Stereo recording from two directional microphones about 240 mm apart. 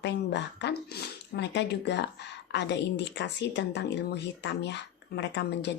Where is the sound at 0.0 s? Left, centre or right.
Left.